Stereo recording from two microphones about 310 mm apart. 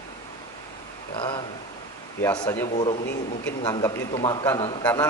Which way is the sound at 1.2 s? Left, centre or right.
Centre.